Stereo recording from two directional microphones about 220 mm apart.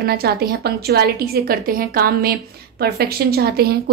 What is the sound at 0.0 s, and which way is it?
A woman's voice, 45° right (ahead or behind).